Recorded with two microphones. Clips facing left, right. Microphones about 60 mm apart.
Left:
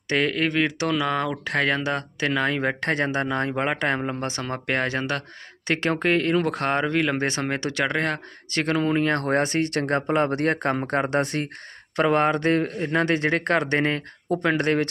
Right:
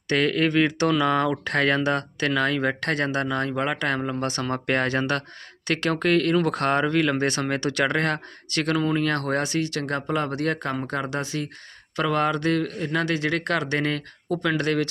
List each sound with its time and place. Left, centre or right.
0.1 s speech: centre
5.6 s speech: left
8.5 s speech: left
11.9 s speech: left